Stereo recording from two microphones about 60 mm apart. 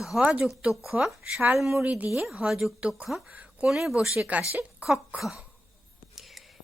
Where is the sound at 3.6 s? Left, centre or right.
Centre.